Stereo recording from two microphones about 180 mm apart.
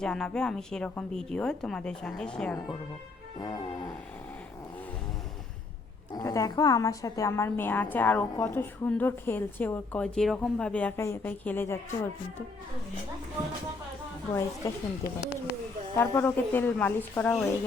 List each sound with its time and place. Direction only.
0.0 s a woman's voice: 5° left (ahead or behind)
3.4 s music: 20° left (ahead or behind)
6.1 s a woman's voice: 20° left (ahead or behind)
14.6 s a woman's voice: 15° left (ahead or behind)
15.0 s speech: 65° left (ahead or behind)
16.0 s a woman's voice: 10° left (ahead or behind)